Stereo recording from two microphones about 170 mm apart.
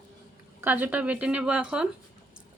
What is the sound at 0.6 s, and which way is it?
A woman's voice, 10° right (ahead or behind).